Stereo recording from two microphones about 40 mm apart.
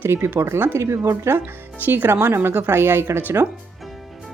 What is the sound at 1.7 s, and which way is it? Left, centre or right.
Speech, right.